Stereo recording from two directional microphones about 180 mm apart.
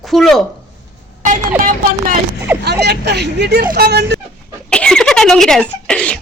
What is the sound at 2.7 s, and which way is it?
Speech, 70° right (ahead or behind).